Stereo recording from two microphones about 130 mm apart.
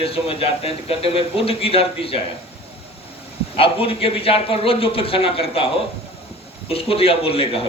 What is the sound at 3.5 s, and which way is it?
Speech, 45° left (ahead or behind).